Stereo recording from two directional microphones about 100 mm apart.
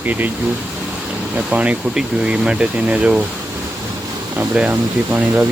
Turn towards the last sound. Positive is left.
turn(degrees=-20)  # may be behind; listen again after turning